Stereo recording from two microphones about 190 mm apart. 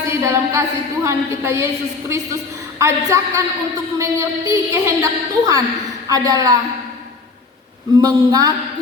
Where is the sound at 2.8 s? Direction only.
15° right (ahead or behind).